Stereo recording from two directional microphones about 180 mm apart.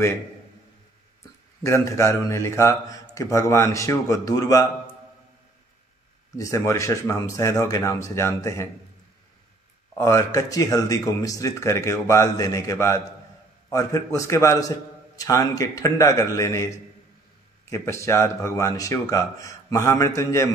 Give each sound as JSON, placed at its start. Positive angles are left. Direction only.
{"t": 1.6, "sound": "speech", "side_deg": 15}
{"t": 6.3, "sound": "speech", "side_deg": 15}
{"t": 9.9, "sound": "speech", "side_deg": 15}